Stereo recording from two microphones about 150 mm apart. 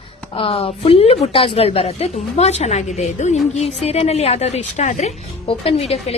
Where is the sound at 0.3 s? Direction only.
40° left (ahead or behind).